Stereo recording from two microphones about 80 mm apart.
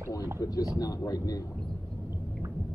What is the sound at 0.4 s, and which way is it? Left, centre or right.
Speech, left.